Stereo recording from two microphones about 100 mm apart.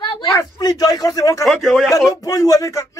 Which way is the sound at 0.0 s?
55° left (ahead or behind).